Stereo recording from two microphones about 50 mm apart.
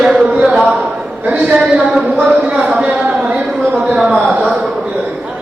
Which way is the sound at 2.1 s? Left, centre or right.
Right.